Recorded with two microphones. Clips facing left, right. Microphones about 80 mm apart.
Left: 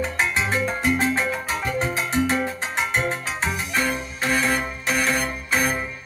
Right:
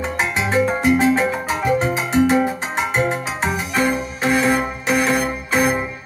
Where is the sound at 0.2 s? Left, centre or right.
Centre.